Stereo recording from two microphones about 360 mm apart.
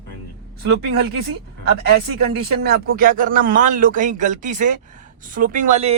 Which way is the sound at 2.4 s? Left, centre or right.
Right.